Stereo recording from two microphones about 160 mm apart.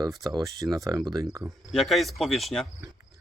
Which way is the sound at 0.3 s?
20° right (ahead or behind).